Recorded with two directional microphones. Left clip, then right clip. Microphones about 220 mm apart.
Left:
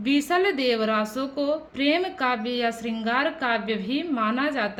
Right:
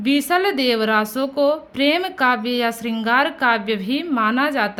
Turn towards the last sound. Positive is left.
turn(degrees=-40)  # may be behind; listen again after turning